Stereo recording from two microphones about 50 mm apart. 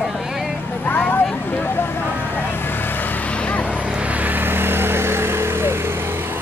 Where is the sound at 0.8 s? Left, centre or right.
Left.